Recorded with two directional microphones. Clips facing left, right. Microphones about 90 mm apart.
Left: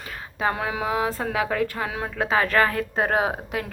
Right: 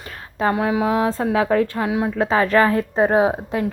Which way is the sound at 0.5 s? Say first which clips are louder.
Right 7 dB; 20° right (ahead or behind).